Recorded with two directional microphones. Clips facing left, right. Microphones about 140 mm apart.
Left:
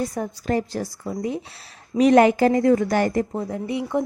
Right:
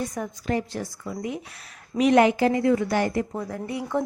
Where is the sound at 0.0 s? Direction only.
35° left (ahead or behind).